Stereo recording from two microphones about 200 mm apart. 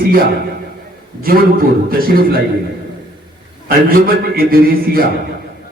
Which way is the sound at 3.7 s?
45° right (ahead or behind).